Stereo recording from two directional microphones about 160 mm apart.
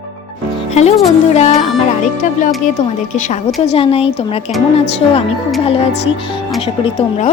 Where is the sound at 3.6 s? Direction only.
35° left (ahead or behind).